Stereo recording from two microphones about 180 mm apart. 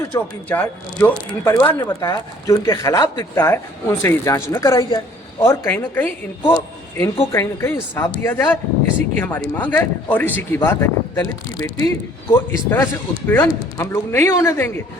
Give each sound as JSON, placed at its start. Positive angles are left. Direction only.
{"t": 0.0, "sound": "speech", "side_deg": 10}
{"t": 6.5, "sound": "a sound", "side_deg": 15}
{"t": 7.3, "sound": "speech", "side_deg": 15}